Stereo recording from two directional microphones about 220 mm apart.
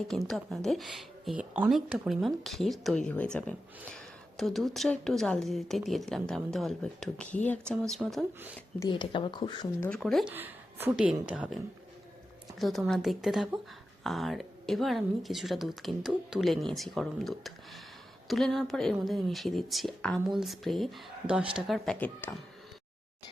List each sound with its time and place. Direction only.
0.3 s a woman's voice: centre (ahead or behind)
8.9 s speech: 20° left (ahead or behind)
9.8 s a woman's voice: 5° left (ahead or behind)